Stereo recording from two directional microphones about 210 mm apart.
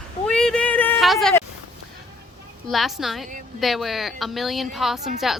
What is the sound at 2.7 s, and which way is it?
A woman's voice, centre (ahead or behind).